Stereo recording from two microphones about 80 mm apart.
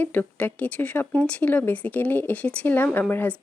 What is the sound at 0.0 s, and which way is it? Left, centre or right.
Speech, left.